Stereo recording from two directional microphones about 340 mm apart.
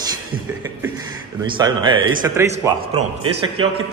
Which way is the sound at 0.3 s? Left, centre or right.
Centre.